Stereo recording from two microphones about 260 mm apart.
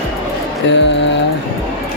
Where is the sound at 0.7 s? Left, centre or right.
Left.